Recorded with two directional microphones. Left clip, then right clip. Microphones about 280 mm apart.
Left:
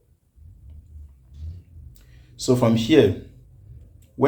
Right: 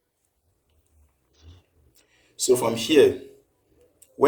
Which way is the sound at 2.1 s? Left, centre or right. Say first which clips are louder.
Right 1 dB; centre.